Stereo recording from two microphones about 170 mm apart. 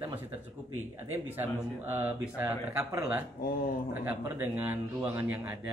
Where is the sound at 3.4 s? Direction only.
55° left (ahead or behind).